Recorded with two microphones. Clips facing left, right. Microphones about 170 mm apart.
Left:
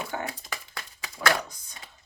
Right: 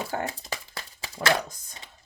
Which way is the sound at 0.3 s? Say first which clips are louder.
Right 2 dB; 25° right (ahead or behind).